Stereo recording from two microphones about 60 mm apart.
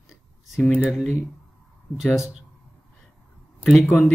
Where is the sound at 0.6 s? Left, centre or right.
Left.